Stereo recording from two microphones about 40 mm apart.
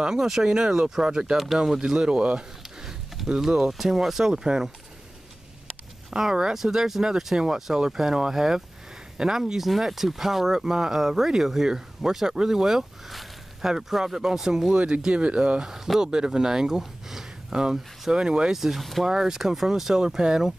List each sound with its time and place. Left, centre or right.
0.1 s speech: centre
3.3 s speech: centre
6.0 s speech: centre
14.7 s speech: right
15.6 s speech: centre
18.6 s speech: centre
19.0 s speech: centre